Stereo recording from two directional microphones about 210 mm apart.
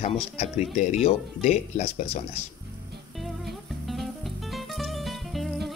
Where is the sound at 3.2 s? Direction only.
Centre (ahead or behind).